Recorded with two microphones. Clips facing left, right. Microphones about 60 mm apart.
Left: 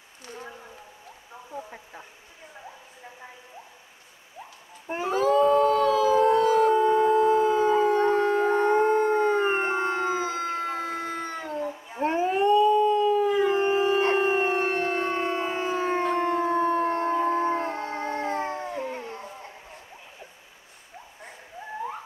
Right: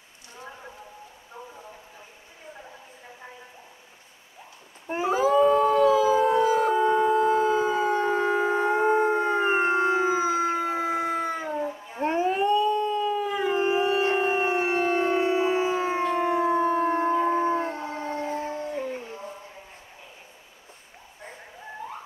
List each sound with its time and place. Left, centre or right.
4.8 s howl: centre
11.9 s howl: centre
14.1 s siren: centre
16.1 s howl: centre
18.2 s howl: left
18.9 s music: left